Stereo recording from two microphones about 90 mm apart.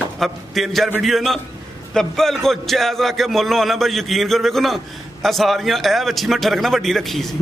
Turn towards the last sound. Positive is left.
turn(degrees=0)  # may be behind; listen again after turning